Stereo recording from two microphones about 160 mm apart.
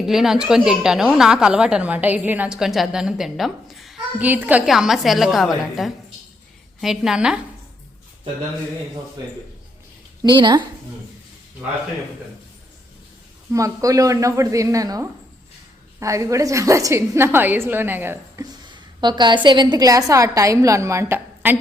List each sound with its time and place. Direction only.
0.0 s a woman's voice: centre (ahead or behind)
10.2 s a woman's voice: 30° right (ahead or behind)
13.5 s a woman's voice: 20° right (ahead or behind)
18.7 s a woman's voice: 25° right (ahead or behind)